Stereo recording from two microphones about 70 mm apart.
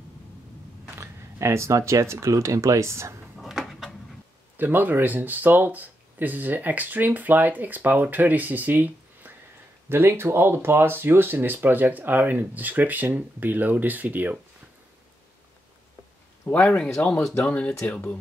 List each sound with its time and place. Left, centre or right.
0.9 s speech: right
3.3 s a sound: centre
4.6 s speech: right
16.5 s speech: left
17.0 s speech: centre